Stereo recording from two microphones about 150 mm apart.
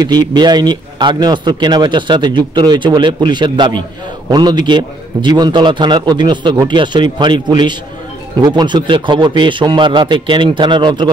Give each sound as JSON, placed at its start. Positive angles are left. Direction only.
{"t": 0.0, "sound": "speech", "side_deg": -25}